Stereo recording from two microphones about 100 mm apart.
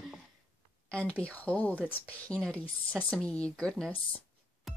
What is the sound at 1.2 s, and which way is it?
A woman's voice, 15° left (ahead or behind).